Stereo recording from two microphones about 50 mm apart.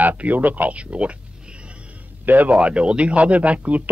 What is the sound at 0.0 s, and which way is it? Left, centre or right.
Speech, right.